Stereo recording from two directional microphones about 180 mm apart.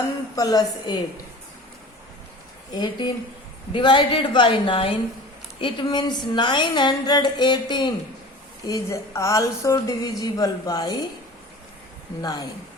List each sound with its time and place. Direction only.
0.3 s a woman's voice: 20° left (ahead or behind)
2.7 s a woman's voice: 25° left (ahead or behind)
12.2 s a woman's voice: 20° left (ahead or behind)